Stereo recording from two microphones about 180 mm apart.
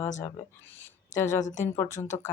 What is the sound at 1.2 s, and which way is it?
Speech, 45° left (ahead or behind).